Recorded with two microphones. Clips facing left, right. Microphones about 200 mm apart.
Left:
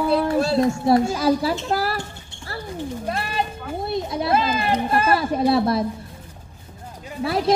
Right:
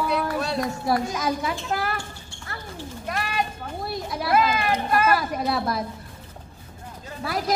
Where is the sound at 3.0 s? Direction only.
30° left (ahead or behind).